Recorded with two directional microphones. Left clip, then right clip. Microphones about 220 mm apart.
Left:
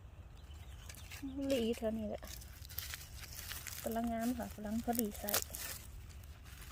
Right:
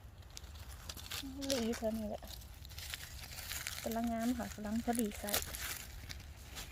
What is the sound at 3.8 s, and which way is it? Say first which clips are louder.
Speech: left 1 dB; 5° right (ahead or behind).